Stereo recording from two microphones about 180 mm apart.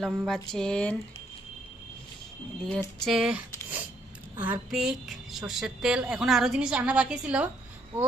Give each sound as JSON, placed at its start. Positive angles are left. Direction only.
{"t": 0.0, "sound": "a woman's voice", "side_deg": 0}
{"t": 2.6, "sound": "a woman's voice", "side_deg": 5}